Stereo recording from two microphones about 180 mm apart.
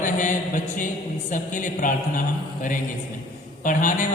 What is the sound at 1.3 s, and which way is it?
Speech, 45° left (ahead or behind).